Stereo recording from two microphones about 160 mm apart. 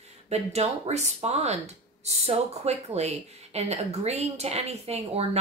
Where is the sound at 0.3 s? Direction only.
45° right (ahead or behind).